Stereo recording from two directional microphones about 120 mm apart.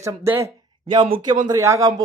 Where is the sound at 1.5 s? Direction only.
25° right (ahead or behind).